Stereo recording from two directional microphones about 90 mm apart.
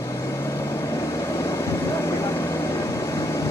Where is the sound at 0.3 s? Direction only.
30° left (ahead or behind).